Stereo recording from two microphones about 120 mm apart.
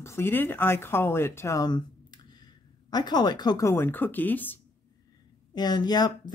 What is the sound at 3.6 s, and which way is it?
Speech, 20° left (ahead or behind).